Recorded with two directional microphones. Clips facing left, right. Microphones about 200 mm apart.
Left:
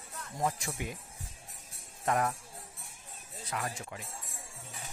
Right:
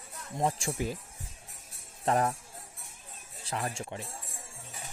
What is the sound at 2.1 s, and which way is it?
Speech, 30° right (ahead or behind).